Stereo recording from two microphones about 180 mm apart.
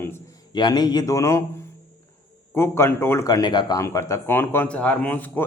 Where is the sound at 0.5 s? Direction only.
25° left (ahead or behind).